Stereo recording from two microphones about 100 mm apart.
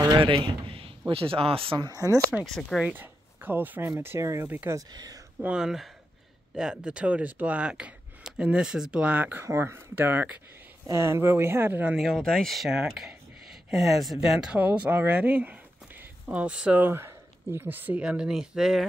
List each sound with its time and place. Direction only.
0.0 s a man's voice: 45° right (ahead or behind)
0.3 s a man's voice: 65° right (ahead or behind)
1.9 s speech: 35° right (ahead or behind)
2.4 s speech: centre (ahead or behind)
2.8 s speech: 20° right (ahead or behind)
4.5 s speech: 20° right (ahead or behind)
4.7 s speech: 40° right (ahead or behind)
5.4 s speech: 10° right (ahead or behind)
11.9 s speech: centre (ahead or behind)